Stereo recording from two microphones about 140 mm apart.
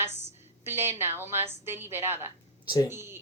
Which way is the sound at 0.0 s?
15° right (ahead or behind).